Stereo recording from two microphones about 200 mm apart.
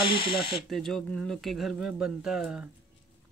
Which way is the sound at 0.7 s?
Centre (ahead or behind).